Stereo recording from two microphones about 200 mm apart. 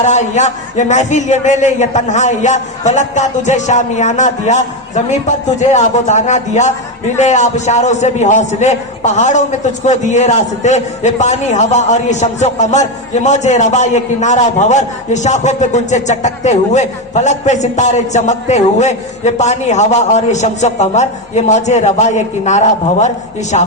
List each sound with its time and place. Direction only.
0.0 s a man's voice: 35° left (ahead or behind)